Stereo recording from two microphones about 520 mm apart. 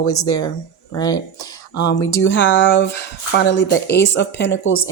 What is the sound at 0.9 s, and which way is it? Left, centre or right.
Speech, centre.